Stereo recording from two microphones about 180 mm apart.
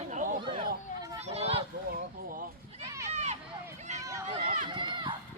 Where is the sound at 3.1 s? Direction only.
40° right (ahead or behind).